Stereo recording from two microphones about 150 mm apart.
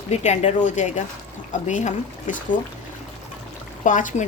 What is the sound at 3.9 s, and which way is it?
Speech, 55° left (ahead or behind).